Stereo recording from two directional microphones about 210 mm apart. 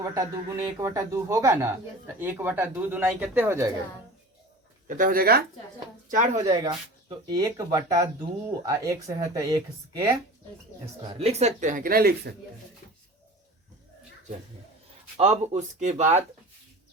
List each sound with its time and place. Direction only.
0.0 s speech: 15° right (ahead or behind)
4.9 s speech: 40° right (ahead or behind)
6.5 s speech: 20° right (ahead or behind)
11.1 s speech: 30° right (ahead or behind); by 12.3 s 45° right (ahead or behind)
15.2 s speech: 30° right (ahead or behind)